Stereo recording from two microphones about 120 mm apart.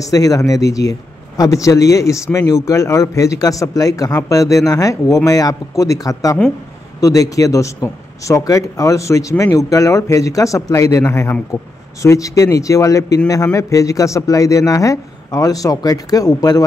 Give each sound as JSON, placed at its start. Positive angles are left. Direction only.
{"t": 0.0, "sound": "speech", "side_deg": 30}